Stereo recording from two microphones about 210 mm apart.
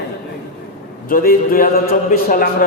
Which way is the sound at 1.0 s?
40° left (ahead or behind).